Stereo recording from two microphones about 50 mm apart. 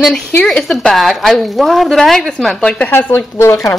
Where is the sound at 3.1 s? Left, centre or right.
Left.